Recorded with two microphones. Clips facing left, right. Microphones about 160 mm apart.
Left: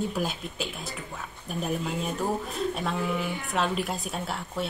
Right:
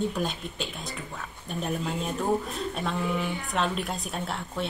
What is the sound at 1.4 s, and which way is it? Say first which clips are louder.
A woman's voice: even; 5° left (ahead or behind).